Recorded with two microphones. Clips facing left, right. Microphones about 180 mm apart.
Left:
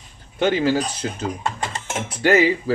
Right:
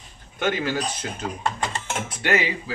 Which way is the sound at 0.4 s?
30° left (ahead or behind).